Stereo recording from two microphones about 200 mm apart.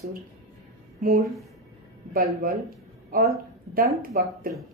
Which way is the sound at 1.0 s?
45° right (ahead or behind).